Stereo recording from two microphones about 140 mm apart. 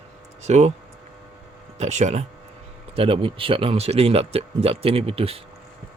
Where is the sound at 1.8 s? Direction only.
55° right (ahead or behind).